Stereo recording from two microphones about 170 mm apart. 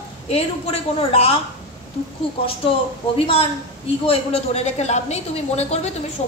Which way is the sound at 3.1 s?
35° left (ahead or behind).